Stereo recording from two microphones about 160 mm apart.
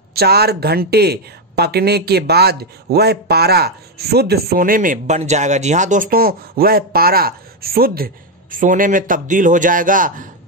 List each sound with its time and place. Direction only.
0.1 s speech: 80° right; by 10.2 s 55° right (ahead or behind)